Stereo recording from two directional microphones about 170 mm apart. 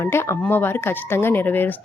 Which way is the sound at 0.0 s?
15° left (ahead or behind).